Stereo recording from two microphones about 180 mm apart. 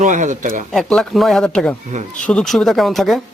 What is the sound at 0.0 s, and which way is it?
Speech, 45° right (ahead or behind).